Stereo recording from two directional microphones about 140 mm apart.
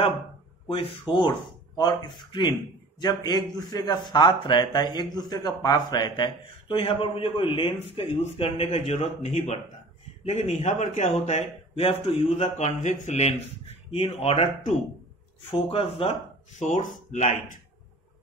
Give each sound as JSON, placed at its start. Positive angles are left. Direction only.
{"t": 0.7, "sound": "a man's voice", "side_deg": 40}
{"t": 13.9, "sound": "a man's voice", "side_deg": 40}
{"t": 15.5, "sound": "a man's voice", "side_deg": 40}
{"t": 16.5, "sound": "speech", "side_deg": 60}